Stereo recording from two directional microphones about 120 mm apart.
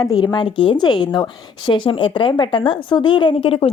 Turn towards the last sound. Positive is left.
turn(degrees=50)  # may be behind; listen again after turning